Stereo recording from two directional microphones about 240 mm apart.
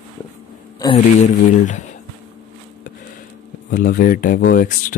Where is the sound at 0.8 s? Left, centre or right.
Left.